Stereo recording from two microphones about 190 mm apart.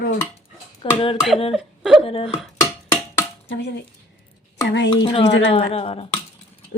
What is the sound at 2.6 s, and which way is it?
Music, 15° left (ahead or behind).